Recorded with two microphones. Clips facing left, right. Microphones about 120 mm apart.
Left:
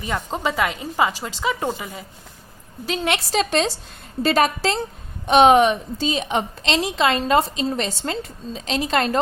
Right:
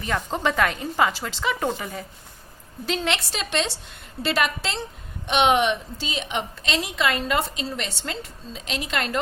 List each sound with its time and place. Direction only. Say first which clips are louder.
0.0 s speech: even; 10° left (ahead or behind)
3.2 s a woman's voice: left 7 dB; 40° left (ahead or behind)